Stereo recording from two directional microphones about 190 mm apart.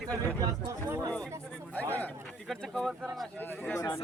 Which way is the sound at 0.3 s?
20° right (ahead or behind).